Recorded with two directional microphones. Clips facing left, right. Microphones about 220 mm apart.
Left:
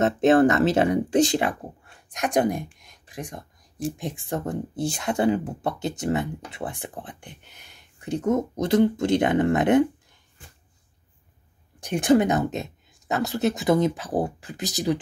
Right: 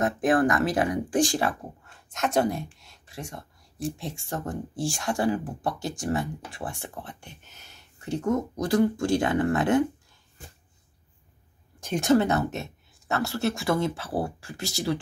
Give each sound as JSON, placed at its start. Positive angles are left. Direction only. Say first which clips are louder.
{"t": 0.0, "sound": "speech", "louder": "left 5 dB", "side_deg": 25}
{"t": 11.8, "sound": "speech", "louder": "left 2 dB", "side_deg": 15}